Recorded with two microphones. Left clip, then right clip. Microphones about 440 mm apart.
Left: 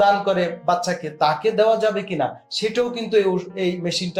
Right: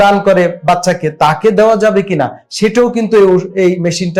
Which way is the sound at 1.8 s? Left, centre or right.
Right.